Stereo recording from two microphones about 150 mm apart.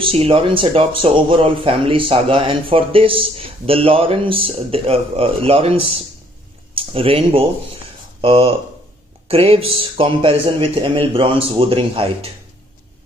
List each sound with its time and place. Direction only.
0.0 s speech: 40° right (ahead or behind)